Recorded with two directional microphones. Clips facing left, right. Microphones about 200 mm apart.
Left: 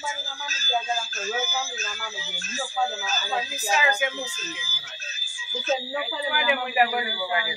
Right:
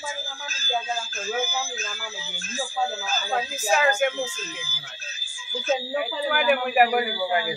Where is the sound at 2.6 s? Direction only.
10° right (ahead or behind).